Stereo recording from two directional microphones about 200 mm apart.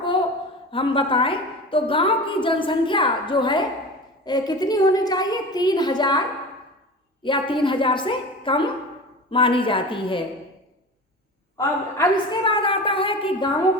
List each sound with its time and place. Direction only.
0.7 s a woman's voice: 25° left (ahead or behind)
11.5 s a woman's voice: 20° left (ahead or behind)